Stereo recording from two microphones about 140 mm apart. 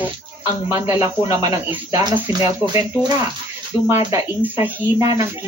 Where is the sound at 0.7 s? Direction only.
25° right (ahead or behind).